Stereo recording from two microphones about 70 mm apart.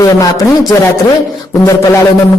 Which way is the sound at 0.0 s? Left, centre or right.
Left.